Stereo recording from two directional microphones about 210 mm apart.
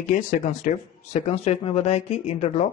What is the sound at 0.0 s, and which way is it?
Speech, 35° left (ahead or behind).